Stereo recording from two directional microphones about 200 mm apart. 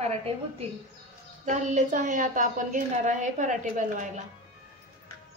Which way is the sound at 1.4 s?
35° right (ahead or behind).